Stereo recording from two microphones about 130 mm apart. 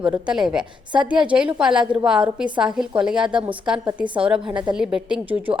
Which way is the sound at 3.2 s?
40° right (ahead or behind).